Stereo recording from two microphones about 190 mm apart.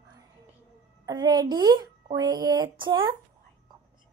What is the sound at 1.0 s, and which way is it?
Speech, 20° right (ahead or behind).